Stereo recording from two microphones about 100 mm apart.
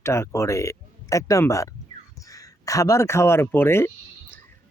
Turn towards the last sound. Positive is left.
turn(degrees=25)  # may be behind; listen again after turning